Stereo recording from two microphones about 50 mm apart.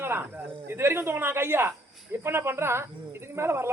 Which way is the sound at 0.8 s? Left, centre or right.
Right.